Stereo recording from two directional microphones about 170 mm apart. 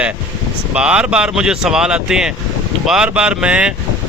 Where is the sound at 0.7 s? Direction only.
5° right (ahead or behind).